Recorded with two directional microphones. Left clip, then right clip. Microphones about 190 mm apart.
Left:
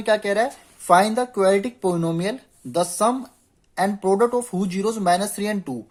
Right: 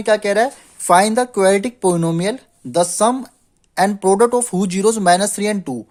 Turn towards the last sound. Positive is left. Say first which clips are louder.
# right 6 dB
turn(degrees=-40)  # may be behind; listen again after turning